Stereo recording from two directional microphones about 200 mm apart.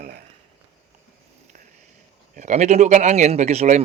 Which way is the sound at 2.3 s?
35° right (ahead or behind).